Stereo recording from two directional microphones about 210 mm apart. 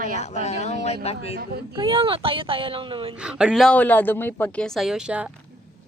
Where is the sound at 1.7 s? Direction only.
25° right (ahead or behind).